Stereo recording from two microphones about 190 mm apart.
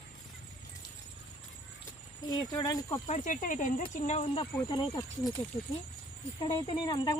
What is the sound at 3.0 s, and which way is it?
Speech, 40° left (ahead or behind).